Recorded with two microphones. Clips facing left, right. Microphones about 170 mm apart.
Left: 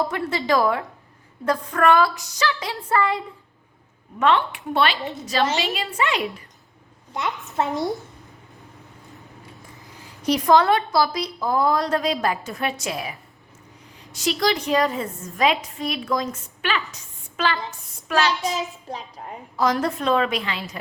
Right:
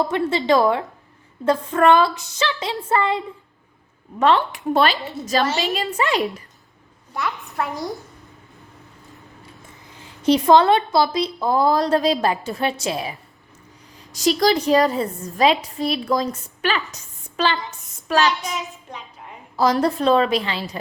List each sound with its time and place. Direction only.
0.1 s a woman's voice: 25° right (ahead or behind)
4.2 s a woman's voice: 35° right (ahead or behind)
7.1 s a woman's voice: 20° left (ahead or behind)
7.8 s a child's voice: centre (ahead or behind)
9.8 s a woman's voice: 25° right (ahead or behind)
14.1 s a woman's voice: 40° right (ahead or behind)
17.3 s a woman's voice: 30° right (ahead or behind)
18.9 s a sound: 35° left (ahead or behind)
19.8 s a woman's voice: 35° right (ahead or behind)